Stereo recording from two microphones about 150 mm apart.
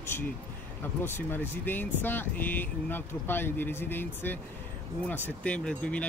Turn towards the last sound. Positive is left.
turn(degrees=10)  # may be behind; listen again after turning